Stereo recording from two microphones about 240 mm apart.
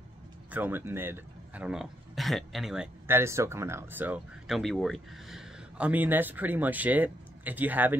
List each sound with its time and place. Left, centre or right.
0.5 s a man's voice: centre